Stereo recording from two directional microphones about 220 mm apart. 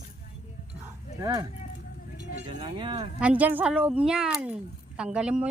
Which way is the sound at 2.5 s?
20° right (ahead or behind).